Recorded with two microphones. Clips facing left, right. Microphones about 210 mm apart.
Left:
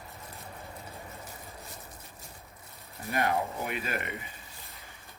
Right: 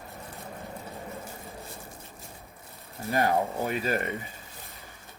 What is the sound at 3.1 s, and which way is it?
Speech, 30° right (ahead or behind).